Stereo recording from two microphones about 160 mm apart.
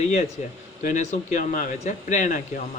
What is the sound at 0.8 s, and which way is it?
Speech, 50° left (ahead or behind).